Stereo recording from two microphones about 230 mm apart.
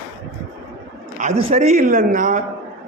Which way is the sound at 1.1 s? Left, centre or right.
Right.